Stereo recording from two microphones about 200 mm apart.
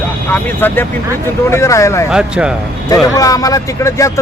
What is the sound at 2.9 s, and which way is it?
A man's voice, 15° left (ahead or behind).